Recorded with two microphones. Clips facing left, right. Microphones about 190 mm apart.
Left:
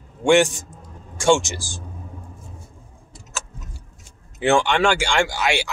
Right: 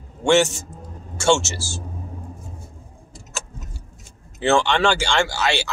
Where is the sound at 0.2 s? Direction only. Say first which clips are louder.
Left 1 dB; 15° left (ahead or behind).